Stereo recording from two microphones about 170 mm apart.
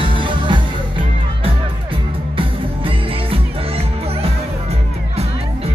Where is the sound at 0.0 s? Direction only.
30° right (ahead or behind).